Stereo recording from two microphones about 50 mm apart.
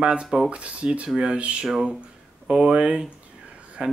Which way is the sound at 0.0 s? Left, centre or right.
Centre.